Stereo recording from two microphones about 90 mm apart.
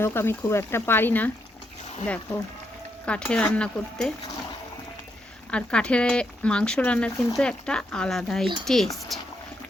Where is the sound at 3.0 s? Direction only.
10° left (ahead or behind).